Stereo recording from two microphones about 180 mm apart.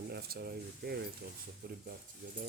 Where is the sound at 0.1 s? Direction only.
60° right (ahead or behind).